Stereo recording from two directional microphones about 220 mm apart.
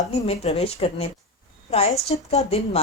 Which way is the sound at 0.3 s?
25° left (ahead or behind).